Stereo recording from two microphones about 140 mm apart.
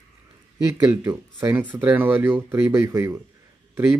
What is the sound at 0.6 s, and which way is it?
Speech, 20° right (ahead or behind).